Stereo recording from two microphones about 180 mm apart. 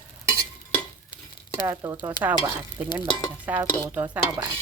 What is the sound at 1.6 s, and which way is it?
Stir, 20° right (ahead or behind).